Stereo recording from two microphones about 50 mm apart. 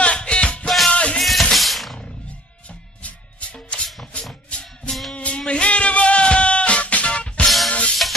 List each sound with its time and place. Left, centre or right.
0.0 s music: left
1.2 s music: centre
3.5 s music: centre
5.1 s music: left
7.4 s music: centre